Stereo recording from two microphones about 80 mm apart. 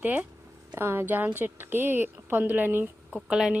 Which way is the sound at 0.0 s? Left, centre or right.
Centre.